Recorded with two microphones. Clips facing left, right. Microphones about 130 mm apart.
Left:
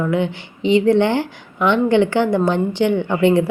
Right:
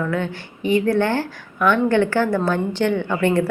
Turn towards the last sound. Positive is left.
turn(degrees=20)  # may be behind; listen again after turning